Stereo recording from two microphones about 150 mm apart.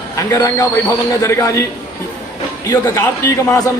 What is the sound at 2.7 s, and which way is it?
A man's voice, 20° left (ahead or behind).